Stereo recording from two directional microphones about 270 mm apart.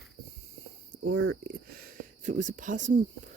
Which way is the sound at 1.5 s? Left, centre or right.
Right.